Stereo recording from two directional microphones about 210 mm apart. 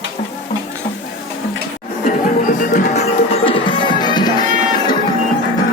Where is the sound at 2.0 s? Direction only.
40° left (ahead or behind); by 4.4 s 20° left (ahead or behind).